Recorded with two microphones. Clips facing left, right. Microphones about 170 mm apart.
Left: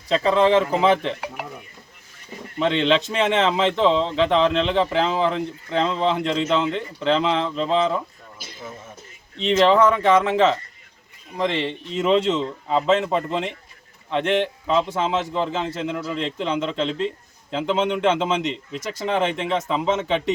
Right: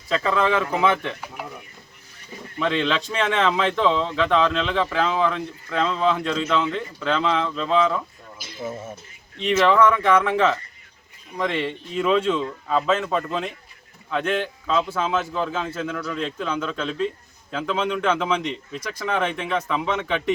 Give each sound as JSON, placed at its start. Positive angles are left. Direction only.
{"t": 0.1, "sound": "speech", "side_deg": 25}
{"t": 2.6, "sound": "speech", "side_deg": 25}
{"t": 9.4, "sound": "speech", "side_deg": 25}